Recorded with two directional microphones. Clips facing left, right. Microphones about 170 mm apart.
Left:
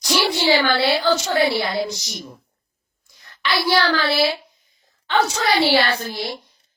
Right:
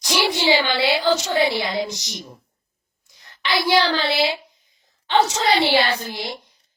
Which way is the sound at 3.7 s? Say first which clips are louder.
Even; 15° right (ahead or behind).